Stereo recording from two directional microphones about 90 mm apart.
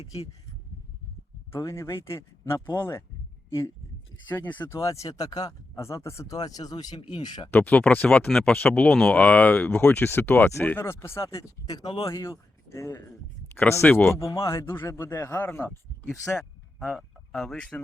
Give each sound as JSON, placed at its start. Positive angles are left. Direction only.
{"t": 1.5, "sound": "speech", "side_deg": 30}
{"t": 4.3, "sound": "speech", "side_deg": 20}
{"t": 4.7, "sound": "speech", "side_deg": 35}
{"t": 5.8, "sound": "speech", "side_deg": 30}
{"t": 7.5, "sound": "speech", "side_deg": 15}
{"t": 8.9, "sound": "speech", "side_deg": 5}
{"t": 9.1, "sound": "speech", "side_deg": 15}
{"t": 13.6, "sound": "speech", "side_deg": 25}
{"t": 15.4, "sound": "speech", "side_deg": 20}
{"t": 16.4, "sound": "speech", "side_deg": 5}